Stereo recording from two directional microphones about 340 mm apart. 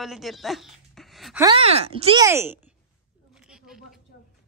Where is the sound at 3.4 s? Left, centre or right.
Centre.